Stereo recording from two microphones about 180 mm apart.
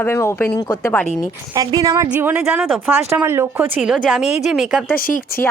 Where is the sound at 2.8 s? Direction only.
10° right (ahead or behind).